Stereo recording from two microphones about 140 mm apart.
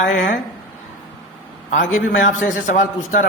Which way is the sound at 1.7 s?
65° left (ahead or behind).